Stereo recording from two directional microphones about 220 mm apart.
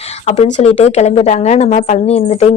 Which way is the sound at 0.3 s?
30° left (ahead or behind).